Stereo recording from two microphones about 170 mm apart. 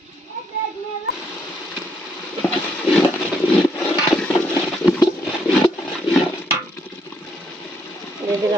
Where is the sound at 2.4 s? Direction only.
5° left (ahead or behind).